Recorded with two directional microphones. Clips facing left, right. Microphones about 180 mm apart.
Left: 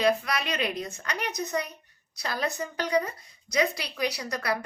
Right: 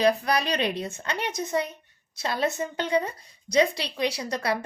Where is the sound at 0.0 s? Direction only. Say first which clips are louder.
Right 3 dB; 35° right (ahead or behind).